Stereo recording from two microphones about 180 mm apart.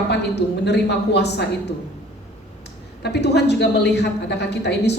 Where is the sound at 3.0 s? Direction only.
70° left (ahead or behind).